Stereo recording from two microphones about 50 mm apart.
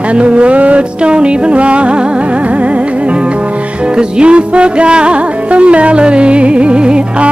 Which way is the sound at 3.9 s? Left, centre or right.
Right.